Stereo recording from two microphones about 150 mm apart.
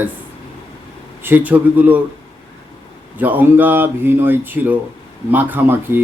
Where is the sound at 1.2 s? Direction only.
15° right (ahead or behind).